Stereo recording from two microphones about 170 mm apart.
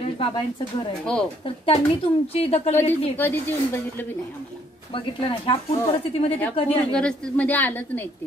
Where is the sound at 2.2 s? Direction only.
35° left (ahead or behind).